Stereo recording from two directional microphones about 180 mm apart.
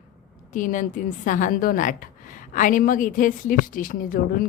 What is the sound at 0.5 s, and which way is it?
A woman's voice, 45° left (ahead or behind).